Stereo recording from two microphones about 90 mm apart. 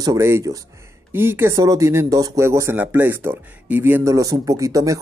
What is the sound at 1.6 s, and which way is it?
Speech, 35° right (ahead or behind).